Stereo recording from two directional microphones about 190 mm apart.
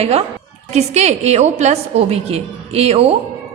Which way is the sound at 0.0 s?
35° right (ahead or behind).